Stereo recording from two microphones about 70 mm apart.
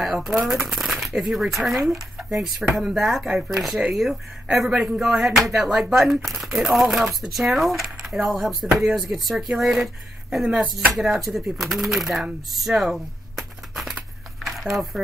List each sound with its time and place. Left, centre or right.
0.0 s speech: centre
10.4 s chopping: centre
11.0 s speech: centre
14.4 s a sound: centre